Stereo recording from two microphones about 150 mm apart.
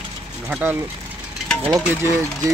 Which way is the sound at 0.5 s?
10° right (ahead or behind).